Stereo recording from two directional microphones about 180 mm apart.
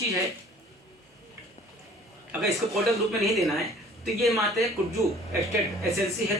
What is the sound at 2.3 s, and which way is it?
Speech, centre (ahead or behind).